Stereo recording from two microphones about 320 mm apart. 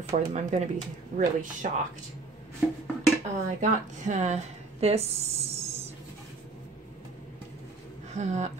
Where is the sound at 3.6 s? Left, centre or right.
Right.